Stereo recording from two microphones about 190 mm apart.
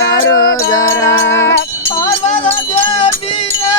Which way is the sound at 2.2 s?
40° left (ahead or behind).